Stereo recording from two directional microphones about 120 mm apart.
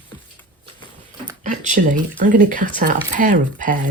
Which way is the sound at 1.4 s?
85° right.